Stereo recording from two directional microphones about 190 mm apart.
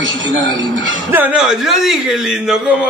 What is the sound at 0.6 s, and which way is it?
Speech, 75° right (ahead or behind).